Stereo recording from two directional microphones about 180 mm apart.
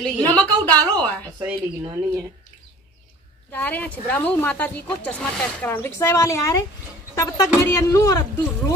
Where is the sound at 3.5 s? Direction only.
10° left (ahead or behind).